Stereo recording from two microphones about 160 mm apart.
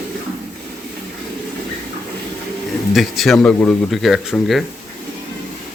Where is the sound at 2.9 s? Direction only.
Centre (ahead or behind).